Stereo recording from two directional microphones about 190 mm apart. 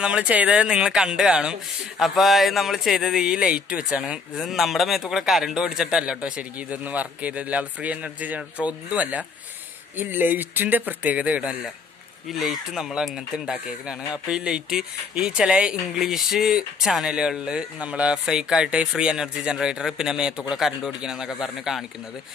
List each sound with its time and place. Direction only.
0.0 s speech: 5° right (ahead or behind)